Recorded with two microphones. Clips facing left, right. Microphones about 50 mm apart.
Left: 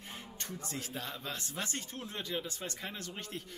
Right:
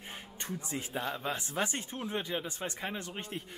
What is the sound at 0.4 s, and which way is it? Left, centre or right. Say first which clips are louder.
Speech: right 4 dB; right.